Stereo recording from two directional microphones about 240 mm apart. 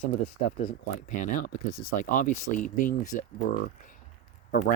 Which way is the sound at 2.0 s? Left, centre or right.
Left.